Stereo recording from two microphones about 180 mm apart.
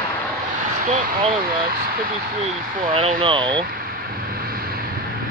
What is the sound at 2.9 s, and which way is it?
Speech, 30° right (ahead or behind).